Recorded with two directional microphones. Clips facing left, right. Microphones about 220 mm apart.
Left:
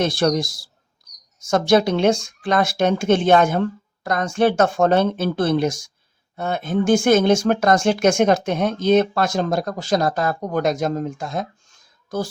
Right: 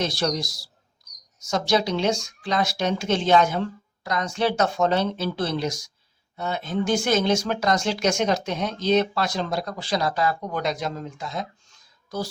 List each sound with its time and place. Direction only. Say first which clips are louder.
0.0 s speech: left 6 dB; 55° left (ahead or behind)